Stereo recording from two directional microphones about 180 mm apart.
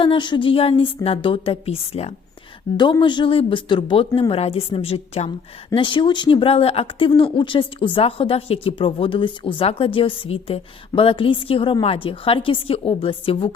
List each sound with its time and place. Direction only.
0.0 s speech: 25° left (ahead or behind)
2.7 s speech: 25° left (ahead or behind)